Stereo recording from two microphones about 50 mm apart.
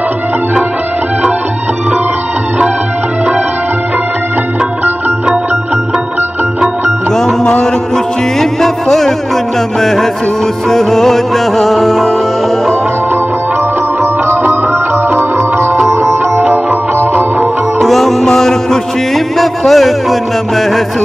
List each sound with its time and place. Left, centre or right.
7.1 s music: centre
8.4 s music: centre
14.3 s music: right
15.3 s music: right
15.9 s sitar: right
17.0 s music: right
17.8 s music: centre